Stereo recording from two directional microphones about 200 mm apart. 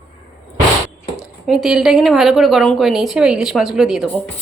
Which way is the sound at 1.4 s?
Centre (ahead or behind).